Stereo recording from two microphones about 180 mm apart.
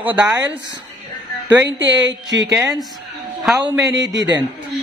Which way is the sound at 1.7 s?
90° right.